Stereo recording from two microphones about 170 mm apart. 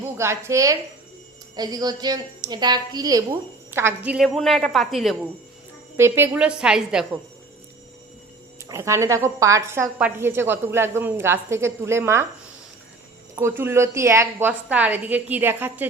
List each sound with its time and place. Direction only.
0.0 s a woman's voice: 15° right (ahead or behind); by 5.1 s centre (ahead or behind)
6.0 s a woman's voice: 15° right (ahead or behind)
8.7 s a woman's voice: 15° right (ahead or behind)
13.3 s a woman's voice: 15° right (ahead or behind)